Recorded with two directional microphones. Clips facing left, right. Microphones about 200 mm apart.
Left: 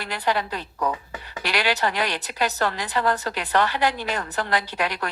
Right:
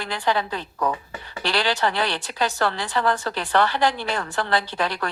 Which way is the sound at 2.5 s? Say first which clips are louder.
Right 1 dB; 40° left (ahead or behind).